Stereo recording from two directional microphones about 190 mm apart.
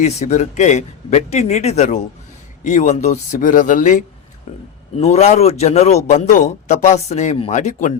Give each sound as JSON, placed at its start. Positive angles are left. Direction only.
{"t": 0.0, "sound": "speech", "side_deg": 35}
{"t": 4.9, "sound": "speech", "side_deg": 35}